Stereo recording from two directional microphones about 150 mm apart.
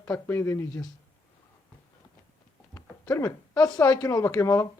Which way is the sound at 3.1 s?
25° left (ahead or behind).